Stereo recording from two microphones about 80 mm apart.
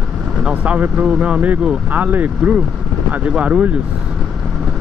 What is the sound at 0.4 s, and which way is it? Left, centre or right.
Speech, centre.